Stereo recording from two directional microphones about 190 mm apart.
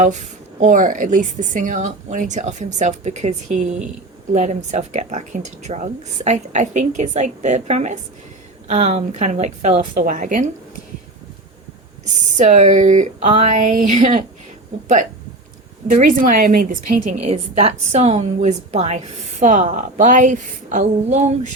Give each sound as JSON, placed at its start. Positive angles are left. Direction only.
{"t": 0.0, "sound": "a woman's voice", "side_deg": -40}
{"t": 12.4, "sound": "a woman's voice", "side_deg": -40}
{"t": 15.9, "sound": "a woman's voice", "side_deg": -45}
{"t": 17.2, "sound": "a woman's voice", "side_deg": -30}